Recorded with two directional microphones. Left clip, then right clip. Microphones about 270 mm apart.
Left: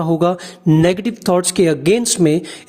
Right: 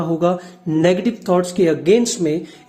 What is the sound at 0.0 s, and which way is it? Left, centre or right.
Speech, left.